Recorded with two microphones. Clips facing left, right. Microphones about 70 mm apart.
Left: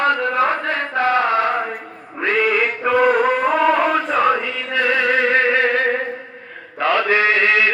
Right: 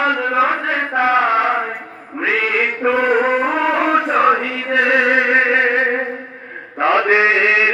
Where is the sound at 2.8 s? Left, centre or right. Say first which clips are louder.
Even; centre.